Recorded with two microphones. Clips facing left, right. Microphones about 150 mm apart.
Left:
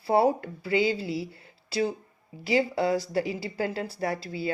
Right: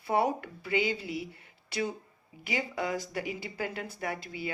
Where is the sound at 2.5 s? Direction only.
30° left (ahead or behind).